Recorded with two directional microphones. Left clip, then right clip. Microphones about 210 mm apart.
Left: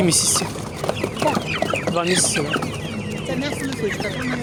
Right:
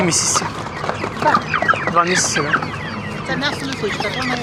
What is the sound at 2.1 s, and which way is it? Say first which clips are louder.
Speech: right 3 dB; 20° left (ahead or behind).